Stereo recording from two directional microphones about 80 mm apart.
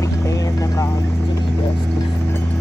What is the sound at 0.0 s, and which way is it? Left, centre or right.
Vehicle, left.